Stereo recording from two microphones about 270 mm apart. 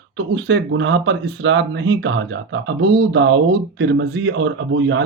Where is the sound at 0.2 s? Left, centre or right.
Right.